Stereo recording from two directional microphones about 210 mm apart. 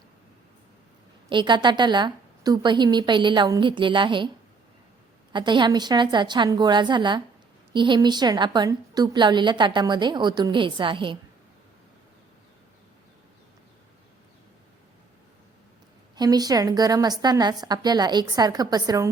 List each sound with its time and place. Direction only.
1.3 s a woman's voice: 20° right (ahead or behind)
5.3 s a woman's voice: 20° right (ahead or behind)
16.1 s a woman's voice: 20° right (ahead or behind)